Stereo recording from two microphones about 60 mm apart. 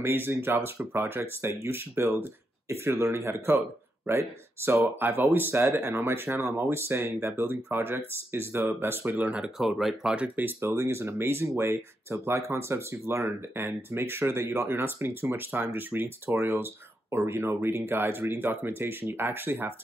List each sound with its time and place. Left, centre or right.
0.0 s speech: right
4.1 s speech: right
9.2 s speech: right
9.6 s speech: centre
10.1 s speech: right
10.6 s speech: right
16.3 s speech: right